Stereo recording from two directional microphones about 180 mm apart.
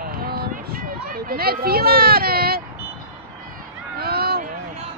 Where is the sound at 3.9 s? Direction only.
60° right (ahead or behind).